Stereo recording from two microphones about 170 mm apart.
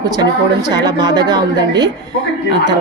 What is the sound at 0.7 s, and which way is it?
Speech, 25° right (ahead or behind).